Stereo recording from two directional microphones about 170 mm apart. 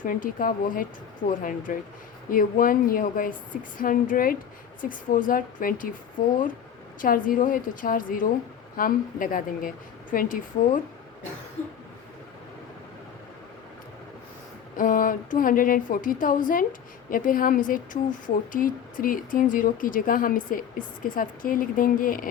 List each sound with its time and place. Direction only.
0.0 s a woman's voice: 55° left (ahead or behind)
7.0 s a woman's voice: 55° left (ahead or behind)
14.8 s speech: 55° left (ahead or behind)